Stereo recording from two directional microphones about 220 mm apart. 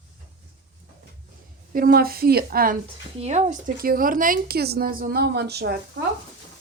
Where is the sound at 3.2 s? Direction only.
30° right (ahead or behind); by 6.0 s 45° right (ahead or behind).